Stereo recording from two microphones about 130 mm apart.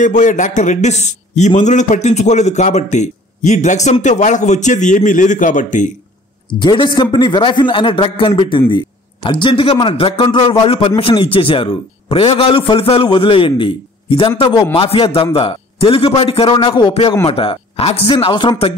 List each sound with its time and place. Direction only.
0.0 s a man's voice: 75° left (ahead or behind)
6.6 s a man's voice: 35° left (ahead or behind)